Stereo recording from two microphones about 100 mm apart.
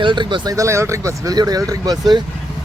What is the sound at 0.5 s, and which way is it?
Speech, 30° right (ahead or behind).